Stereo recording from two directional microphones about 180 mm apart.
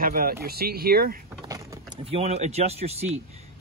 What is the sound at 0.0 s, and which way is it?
Speech, 55° right (ahead or behind).